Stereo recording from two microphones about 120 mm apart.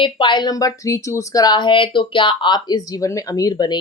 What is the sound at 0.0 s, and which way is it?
Speech, 40° left (ahead or behind).